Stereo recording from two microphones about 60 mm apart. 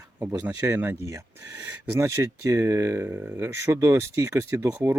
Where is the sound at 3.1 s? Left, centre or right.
Right.